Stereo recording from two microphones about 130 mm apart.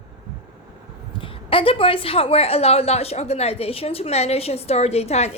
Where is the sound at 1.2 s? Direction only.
45° left (ahead or behind).